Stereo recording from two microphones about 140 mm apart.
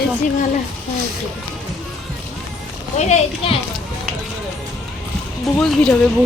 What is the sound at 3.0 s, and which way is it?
Speech, 45° left (ahead or behind).